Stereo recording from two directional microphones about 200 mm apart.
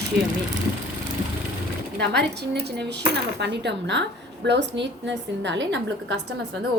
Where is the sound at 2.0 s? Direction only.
55° right (ahead or behind).